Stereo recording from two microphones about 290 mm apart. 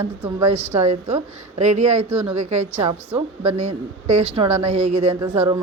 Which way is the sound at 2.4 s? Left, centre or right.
Right.